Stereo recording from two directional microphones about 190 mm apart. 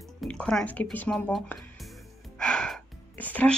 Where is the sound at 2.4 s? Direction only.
5° left (ahead or behind).